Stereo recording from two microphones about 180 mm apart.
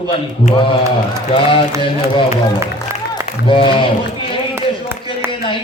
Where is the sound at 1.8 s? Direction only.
30° left (ahead or behind).